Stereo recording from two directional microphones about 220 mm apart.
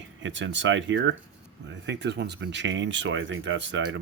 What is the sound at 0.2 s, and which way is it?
Speech, 55° right (ahead or behind).